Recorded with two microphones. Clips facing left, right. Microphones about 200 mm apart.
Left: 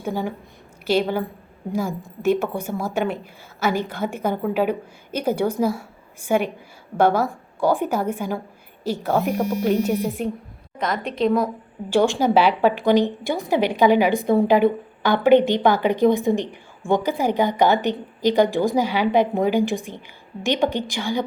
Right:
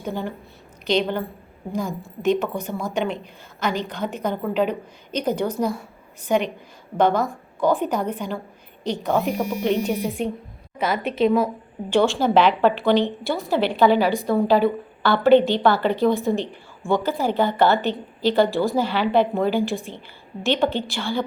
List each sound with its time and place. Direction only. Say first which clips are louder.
0.0 s a woman's voice: left 2 dB; 10° left (ahead or behind)
11.9 s a woman's voice: left 1 dB; 10° left (ahead or behind)